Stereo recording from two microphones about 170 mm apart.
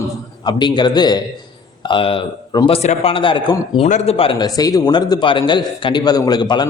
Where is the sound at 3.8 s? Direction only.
40° left (ahead or behind).